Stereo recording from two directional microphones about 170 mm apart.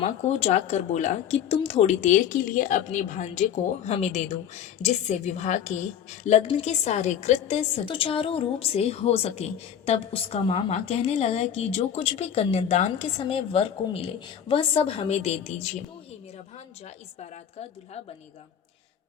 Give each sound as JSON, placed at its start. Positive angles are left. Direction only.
{"t": 0.0, "sound": "speech", "side_deg": 40}
{"t": 17.2, "sound": "speech", "side_deg": 40}